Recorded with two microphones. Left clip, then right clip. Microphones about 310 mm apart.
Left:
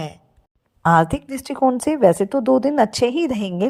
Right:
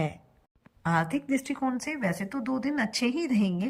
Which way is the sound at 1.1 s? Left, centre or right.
Centre.